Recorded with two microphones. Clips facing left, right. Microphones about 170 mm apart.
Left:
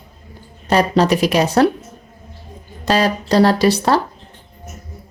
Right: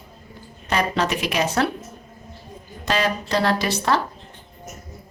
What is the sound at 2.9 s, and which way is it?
Speech, 35° left (ahead or behind).